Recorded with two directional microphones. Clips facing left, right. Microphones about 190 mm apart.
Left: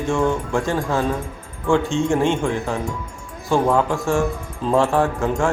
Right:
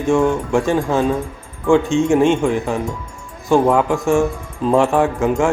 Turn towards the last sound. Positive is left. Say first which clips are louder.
# right 4 dB
turn(degrees=-15)  # may be behind; listen again after turning